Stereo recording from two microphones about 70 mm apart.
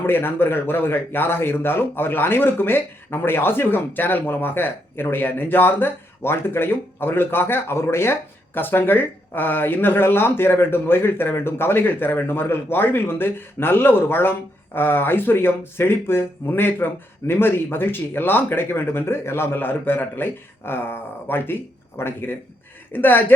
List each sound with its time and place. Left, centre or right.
0.0 s a woman's voice: left